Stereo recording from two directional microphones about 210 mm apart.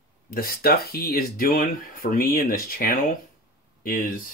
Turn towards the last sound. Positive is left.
turn(degrees=45)  # may be behind; listen again after turning